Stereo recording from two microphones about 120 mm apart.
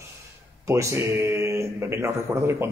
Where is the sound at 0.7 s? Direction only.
25° right (ahead or behind).